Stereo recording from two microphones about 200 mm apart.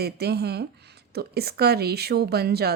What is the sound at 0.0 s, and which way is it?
A woman's voice, 55° right (ahead or behind).